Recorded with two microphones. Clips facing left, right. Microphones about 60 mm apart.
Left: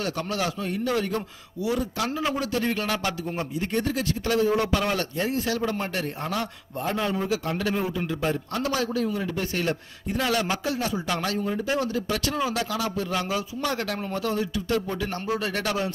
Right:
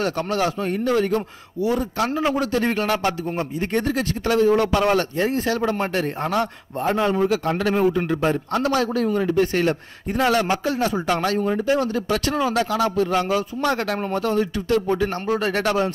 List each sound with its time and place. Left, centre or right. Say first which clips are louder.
0.0 s a man's voice: right 6 dB; right